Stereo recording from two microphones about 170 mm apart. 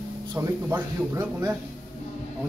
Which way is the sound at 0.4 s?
15° right (ahead or behind).